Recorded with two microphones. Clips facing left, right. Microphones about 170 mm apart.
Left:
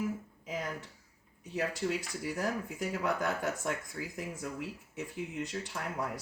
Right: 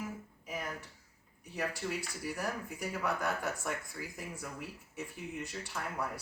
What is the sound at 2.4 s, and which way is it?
Speech, 20° left (ahead or behind).